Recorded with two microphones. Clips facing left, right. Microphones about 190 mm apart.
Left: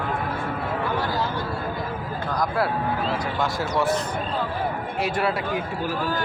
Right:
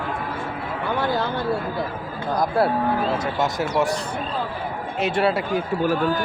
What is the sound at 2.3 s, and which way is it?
Speech, 25° right (ahead or behind).